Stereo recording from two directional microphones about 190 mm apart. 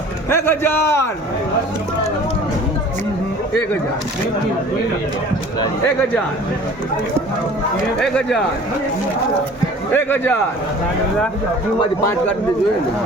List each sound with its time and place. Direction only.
0.3 s a man's voice: 15° left (ahead or behind)
8.0 s speech: centre (ahead or behind)
9.9 s a man's voice: 10° left (ahead or behind)